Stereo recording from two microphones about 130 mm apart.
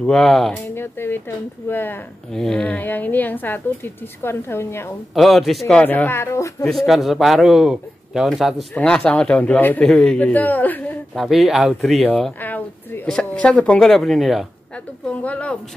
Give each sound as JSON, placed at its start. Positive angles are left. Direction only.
{"t": 0.0, "sound": "speech", "side_deg": 5}
{"t": 0.7, "sound": "a woman's voice", "side_deg": 15}
{"t": 2.3, "sound": "a woman's voice", "side_deg": 5}
{"t": 5.1, "sound": "a woman's voice", "side_deg": 0}
{"t": 6.6, "sound": "a woman's voice", "side_deg": 0}
{"t": 11.1, "sound": "speech", "side_deg": 0}
{"t": 12.1, "sound": "a woman's voice", "side_deg": 15}